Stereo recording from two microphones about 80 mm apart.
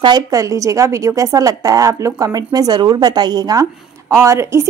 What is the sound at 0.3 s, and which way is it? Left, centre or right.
A woman's voice, right.